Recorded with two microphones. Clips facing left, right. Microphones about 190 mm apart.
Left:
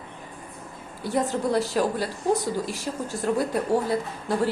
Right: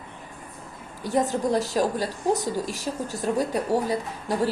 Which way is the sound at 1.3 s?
20° right (ahead or behind).